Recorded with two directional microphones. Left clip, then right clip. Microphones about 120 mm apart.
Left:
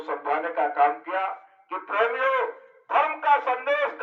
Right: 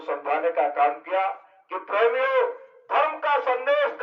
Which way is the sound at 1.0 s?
20° right (ahead or behind).